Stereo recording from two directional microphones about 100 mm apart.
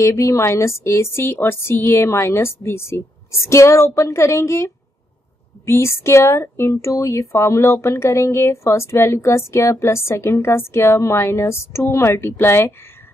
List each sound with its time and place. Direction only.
0.0 s speech: 30° left (ahead or behind)